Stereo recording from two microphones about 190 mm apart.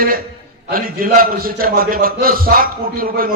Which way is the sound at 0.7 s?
50° right (ahead or behind).